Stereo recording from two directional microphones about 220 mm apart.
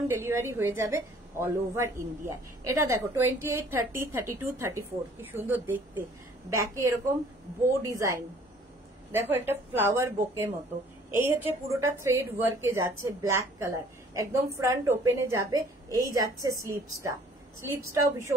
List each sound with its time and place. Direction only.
0.1 s a man's voice: 10° right (ahead or behind)